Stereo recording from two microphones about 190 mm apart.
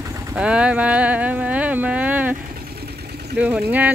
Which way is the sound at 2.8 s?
60° right (ahead or behind).